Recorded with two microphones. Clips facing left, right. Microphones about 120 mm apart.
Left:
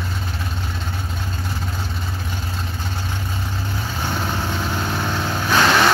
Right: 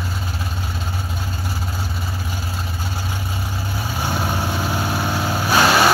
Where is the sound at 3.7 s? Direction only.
10° right (ahead or behind).